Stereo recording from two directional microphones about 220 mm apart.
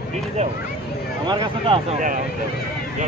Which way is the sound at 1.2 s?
25° right (ahead or behind).